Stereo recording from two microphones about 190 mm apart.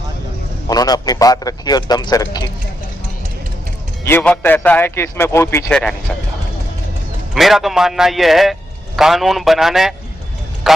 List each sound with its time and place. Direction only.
0.7 s a man's voice: 20° left (ahead or behind)
4.0 s a man's voice: 10° left (ahead or behind)
5.6 s a man's voice: 5° left (ahead or behind)
7.3 s a man's voice: centre (ahead or behind)